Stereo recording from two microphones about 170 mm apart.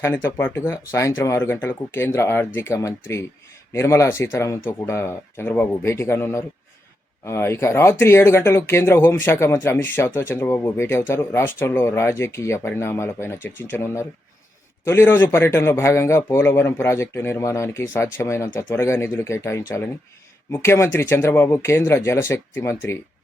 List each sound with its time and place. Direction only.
0.0 s speech: 15° left (ahead or behind)